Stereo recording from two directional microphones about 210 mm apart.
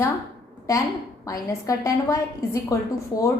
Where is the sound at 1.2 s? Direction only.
15° left (ahead or behind).